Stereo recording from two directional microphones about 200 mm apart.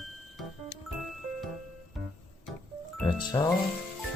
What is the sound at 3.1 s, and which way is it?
Speech, 25° left (ahead or behind).